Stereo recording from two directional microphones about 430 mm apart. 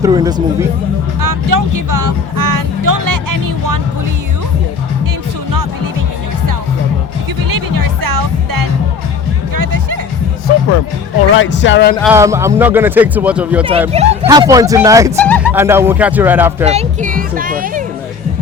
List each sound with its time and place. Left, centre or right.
0.0 s speech: centre
1.2 s music: right
7.5 s music: right
11.3 s speech: left
11.9 s speech: centre
15.2 s a sound: centre
15.6 s music: centre
16.6 s music: centre